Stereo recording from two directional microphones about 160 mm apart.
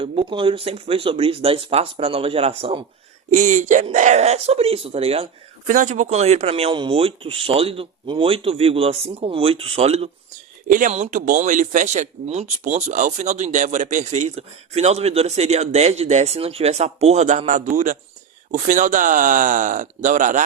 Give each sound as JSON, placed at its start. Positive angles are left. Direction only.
{"t": 0.0, "sound": "speech", "side_deg": -35}
{"t": 3.3, "sound": "speech", "side_deg": -50}
{"t": 5.6, "sound": "speech", "side_deg": -50}
{"t": 10.7, "sound": "speech", "side_deg": -55}